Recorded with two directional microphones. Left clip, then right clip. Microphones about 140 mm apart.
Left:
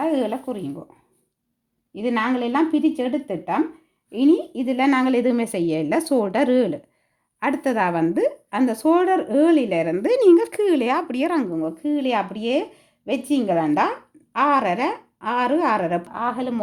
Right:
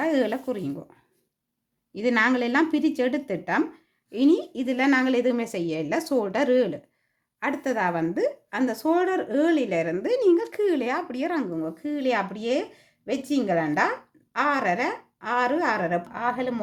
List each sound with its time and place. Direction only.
0.0 s speech: 5° left (ahead or behind)
1.9 s a woman's voice: 10° left (ahead or behind); by 6.8 s 35° left (ahead or behind)
7.3 s a woman's voice: 45° left (ahead or behind)
11.5 s a woman's voice: 25° left (ahead or behind)
16.1 s a woman's voice: 25° left (ahead or behind)